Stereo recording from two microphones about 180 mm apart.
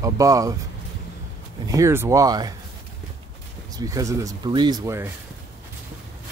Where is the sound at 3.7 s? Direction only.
20° right (ahead or behind).